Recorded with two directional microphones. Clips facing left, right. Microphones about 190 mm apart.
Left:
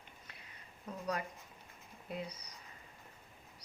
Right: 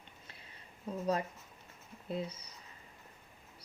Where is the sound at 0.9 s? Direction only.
30° right (ahead or behind).